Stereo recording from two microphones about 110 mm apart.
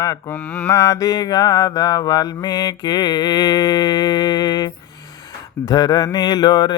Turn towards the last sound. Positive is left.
turn(degrees=45)  # may be behind; listen again after turning